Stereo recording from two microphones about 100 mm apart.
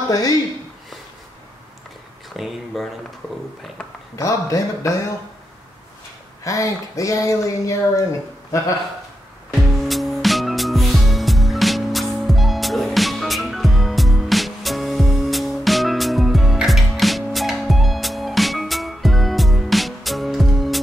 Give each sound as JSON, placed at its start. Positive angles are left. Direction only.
{"t": 0.1, "sound": "speech", "side_deg": 40}
{"t": 2.3, "sound": "speech", "side_deg": 0}
{"t": 4.2, "sound": "speech", "side_deg": 35}
{"t": 6.4, "sound": "speech", "side_deg": 30}
{"t": 9.5, "sound": "music", "side_deg": 0}